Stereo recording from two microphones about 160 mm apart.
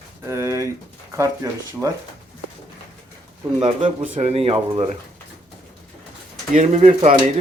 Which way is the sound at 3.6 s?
35° right (ahead or behind).